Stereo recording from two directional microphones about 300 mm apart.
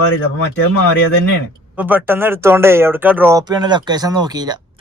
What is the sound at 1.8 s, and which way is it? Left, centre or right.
Speech, centre.